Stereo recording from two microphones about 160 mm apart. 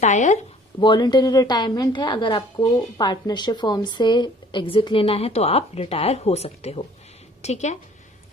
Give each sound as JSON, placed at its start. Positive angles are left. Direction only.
{"t": 0.0, "sound": "a woman's voice", "side_deg": 50}
{"t": 0.8, "sound": "a woman's voice", "side_deg": 30}